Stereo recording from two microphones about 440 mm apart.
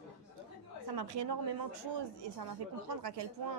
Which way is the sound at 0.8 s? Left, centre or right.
Right.